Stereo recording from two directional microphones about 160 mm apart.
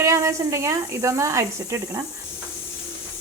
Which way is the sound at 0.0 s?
20° right (ahead or behind).